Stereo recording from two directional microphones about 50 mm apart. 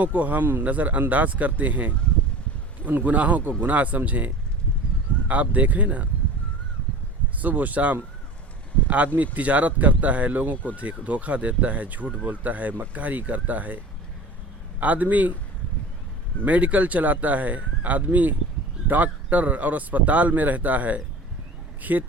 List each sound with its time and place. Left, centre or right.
0.0 s speech: right
5.3 s speech: right
7.3 s speech: right
9.1 s speech: right
14.8 s speech: right
16.4 s speech: right